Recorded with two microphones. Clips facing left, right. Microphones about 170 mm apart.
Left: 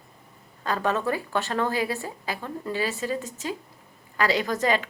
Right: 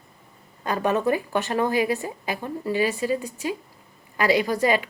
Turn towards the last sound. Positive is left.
turn(degrees=-10)  # may be behind; listen again after turning